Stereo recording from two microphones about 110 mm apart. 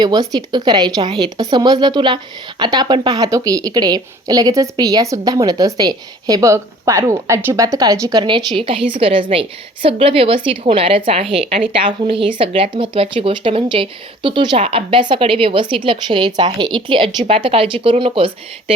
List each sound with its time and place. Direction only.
0.0 s speech: 35° right (ahead or behind)
8.5 s a woman's voice: 55° right (ahead or behind)